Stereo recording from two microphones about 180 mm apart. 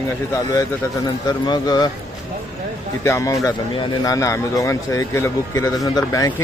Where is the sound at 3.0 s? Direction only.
15° left (ahead or behind).